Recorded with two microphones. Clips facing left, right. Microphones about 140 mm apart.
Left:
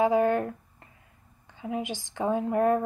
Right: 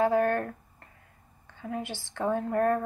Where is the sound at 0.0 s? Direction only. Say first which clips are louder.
Left 2 dB; 15° left (ahead or behind).